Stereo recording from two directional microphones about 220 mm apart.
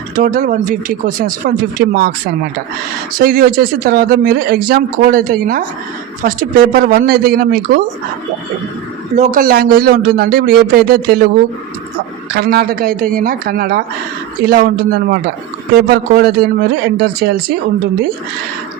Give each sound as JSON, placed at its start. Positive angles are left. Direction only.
{"t": 0.2, "sound": "speech", "side_deg": -40}
{"t": 3.2, "sound": "speech", "side_deg": -40}
{"t": 9.1, "sound": "speech", "side_deg": -35}
{"t": 12.3, "sound": "speech", "side_deg": -45}